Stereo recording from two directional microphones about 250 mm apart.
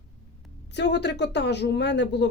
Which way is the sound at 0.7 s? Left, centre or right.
Left.